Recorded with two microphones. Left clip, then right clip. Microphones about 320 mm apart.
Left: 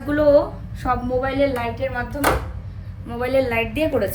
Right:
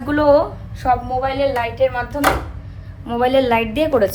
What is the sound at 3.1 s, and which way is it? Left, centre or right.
Speech, centre.